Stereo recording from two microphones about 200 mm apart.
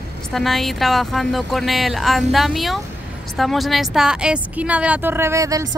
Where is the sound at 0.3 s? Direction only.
Centre (ahead or behind).